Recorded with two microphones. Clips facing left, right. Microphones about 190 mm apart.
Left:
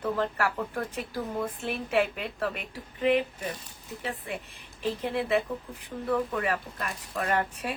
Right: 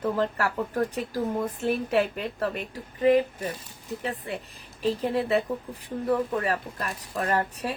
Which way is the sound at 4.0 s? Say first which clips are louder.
Right 1 dB; 40° right (ahead or behind).